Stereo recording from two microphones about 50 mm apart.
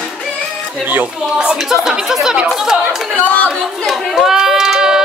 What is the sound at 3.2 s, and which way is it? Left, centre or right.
Speech, left.